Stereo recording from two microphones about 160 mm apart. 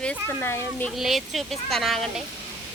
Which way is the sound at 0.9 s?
Centre (ahead or behind).